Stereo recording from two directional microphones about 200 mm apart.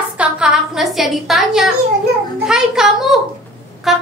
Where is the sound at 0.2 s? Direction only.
5° right (ahead or behind).